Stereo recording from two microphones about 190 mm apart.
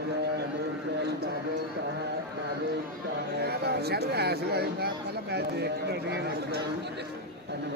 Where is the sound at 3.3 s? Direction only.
55° right (ahead or behind).